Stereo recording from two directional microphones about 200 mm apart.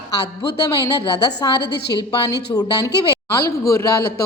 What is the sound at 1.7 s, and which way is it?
Speech, 55° left (ahead or behind).